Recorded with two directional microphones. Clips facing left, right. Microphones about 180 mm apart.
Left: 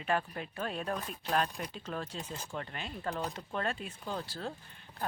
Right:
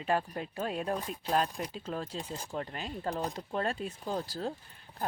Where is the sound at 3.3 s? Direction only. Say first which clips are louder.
Right 3 dB; 35° right (ahead or behind).